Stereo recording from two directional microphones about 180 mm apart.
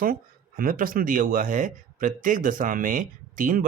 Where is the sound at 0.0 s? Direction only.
50° right (ahead or behind).